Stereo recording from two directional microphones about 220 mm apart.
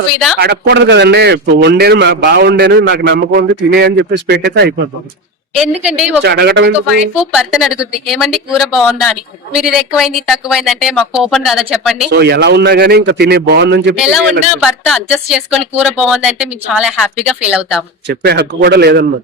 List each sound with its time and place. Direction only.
0.3 s a man's voice: 50° right (ahead or behind)
5.5 s speech: 5° right (ahead or behind)
6.2 s a man's voice: 50° right (ahead or behind)
7.2 s speech: 5° right (ahead or behind)
12.1 s a man's voice: 50° right (ahead or behind)
13.9 s speech: 5° right (ahead or behind)
18.1 s a man's voice: 50° right (ahead or behind)